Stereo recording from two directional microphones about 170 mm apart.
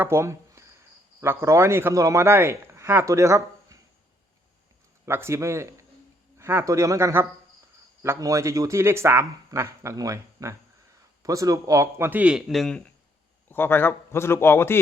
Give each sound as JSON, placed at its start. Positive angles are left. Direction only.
{"t": 0.0, "sound": "a sound", "side_deg": -15}
{"t": 1.2, "sound": "speech", "side_deg": -15}
{"t": 5.0, "sound": "a man's voice", "side_deg": -15}